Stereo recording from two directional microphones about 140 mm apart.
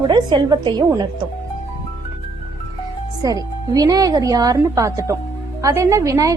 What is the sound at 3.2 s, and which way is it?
A woman's voice, 25° right (ahead or behind).